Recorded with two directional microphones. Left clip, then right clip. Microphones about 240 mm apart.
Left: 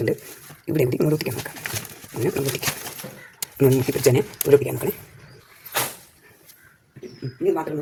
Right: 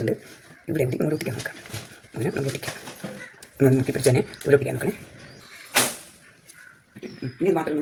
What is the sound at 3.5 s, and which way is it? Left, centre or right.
Speech, left.